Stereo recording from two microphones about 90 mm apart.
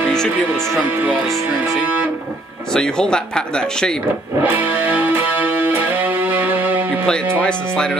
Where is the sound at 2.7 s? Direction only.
10° left (ahead or behind).